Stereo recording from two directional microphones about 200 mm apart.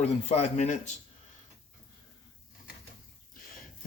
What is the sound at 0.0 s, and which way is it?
Speech, 30° left (ahead or behind).